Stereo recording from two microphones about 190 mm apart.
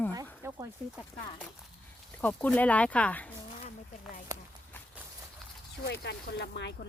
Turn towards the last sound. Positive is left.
turn(degrees=65)  # may be behind; listen again after turning